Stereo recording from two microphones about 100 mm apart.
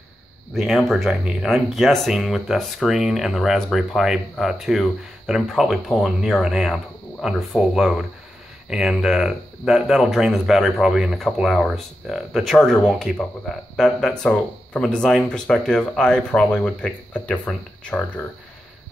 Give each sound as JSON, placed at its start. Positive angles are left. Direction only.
{"t": 0.6, "sound": "speech", "side_deg": 0}